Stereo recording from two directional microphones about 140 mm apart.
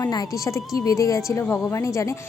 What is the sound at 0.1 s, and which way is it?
A woman's voice, 25° left (ahead or behind).